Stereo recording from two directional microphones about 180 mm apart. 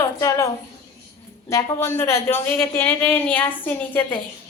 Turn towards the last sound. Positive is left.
turn(degrees=10)  # may be behind; listen again after turning